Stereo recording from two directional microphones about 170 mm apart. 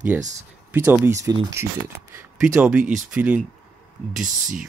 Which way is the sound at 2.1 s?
5° right (ahead or behind).